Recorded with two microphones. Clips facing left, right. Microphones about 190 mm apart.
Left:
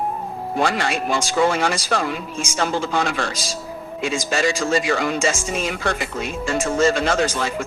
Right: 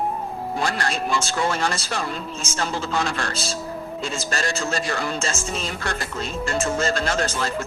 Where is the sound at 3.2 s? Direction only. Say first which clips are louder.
Even; 10° left (ahead or behind).